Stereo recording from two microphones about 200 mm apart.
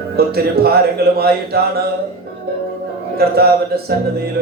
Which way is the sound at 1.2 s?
50° right (ahead or behind).